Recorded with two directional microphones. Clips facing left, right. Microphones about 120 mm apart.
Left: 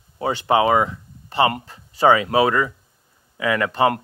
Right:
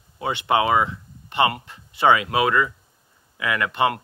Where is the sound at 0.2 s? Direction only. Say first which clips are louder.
Left 3 dB; 40° left (ahead or behind).